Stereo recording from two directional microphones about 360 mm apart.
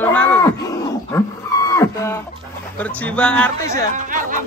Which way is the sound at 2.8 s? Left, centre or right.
Centre.